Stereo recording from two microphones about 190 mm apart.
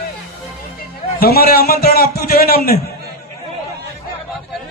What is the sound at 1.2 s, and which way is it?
A man's voice, 55° left (ahead or behind).